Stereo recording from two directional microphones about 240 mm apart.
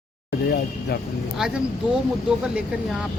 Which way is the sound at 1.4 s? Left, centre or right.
Centre.